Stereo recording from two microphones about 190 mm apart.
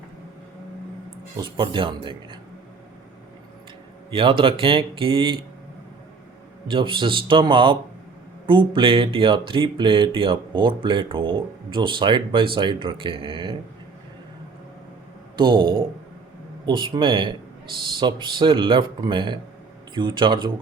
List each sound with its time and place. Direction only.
1.4 s speech: 25° right (ahead or behind)
4.1 s speech: 25° right (ahead or behind)
6.7 s speech: 25° right (ahead or behind)
15.4 s speech: 25° right (ahead or behind)